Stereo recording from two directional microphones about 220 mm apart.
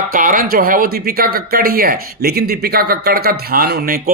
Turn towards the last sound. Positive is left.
turn(degrees=-45)  # may be behind; listen again after turning